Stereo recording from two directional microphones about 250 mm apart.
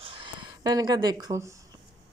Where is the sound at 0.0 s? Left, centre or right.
Right.